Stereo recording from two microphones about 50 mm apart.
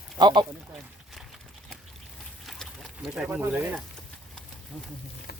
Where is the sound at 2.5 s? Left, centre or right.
Centre.